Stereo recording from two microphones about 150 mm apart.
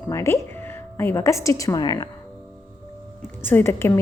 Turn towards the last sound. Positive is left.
turn(degrees=15)  # may be behind; listen again after turning